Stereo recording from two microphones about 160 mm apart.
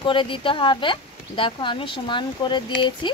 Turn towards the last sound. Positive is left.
turn(degrees=30)  # may be behind; listen again after turning